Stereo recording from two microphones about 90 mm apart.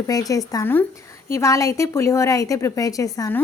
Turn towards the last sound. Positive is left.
turn(degrees=40)  # may be behind; listen again after turning